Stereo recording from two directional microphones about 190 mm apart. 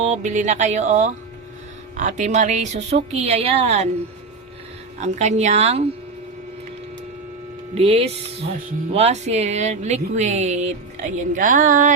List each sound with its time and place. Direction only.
0.0 s speech: 40° right (ahead or behind)
4.9 s speech: 35° right (ahead or behind)
7.8 s speech: 30° right (ahead or behind)